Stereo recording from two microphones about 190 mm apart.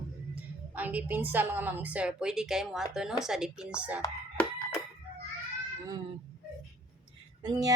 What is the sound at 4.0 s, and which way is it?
Crowing, 15° left (ahead or behind).